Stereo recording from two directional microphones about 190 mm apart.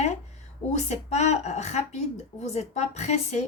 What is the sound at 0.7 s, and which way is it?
A woman's voice, 35° left (ahead or behind).